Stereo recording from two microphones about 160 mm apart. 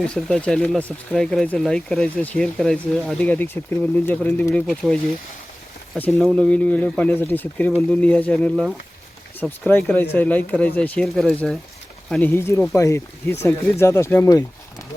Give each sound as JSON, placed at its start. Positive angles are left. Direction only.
{"t": 0.1, "sound": "speech", "side_deg": 5}
{"t": 6.0, "sound": "speech", "side_deg": 5}
{"t": 12.1, "sound": "speech", "side_deg": 15}